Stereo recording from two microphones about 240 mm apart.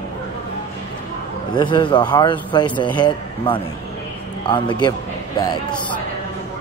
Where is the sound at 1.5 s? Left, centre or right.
Centre.